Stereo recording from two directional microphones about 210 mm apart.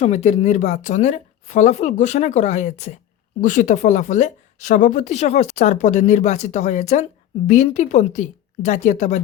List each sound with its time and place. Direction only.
0.0 s speech: 30° left (ahead or behind)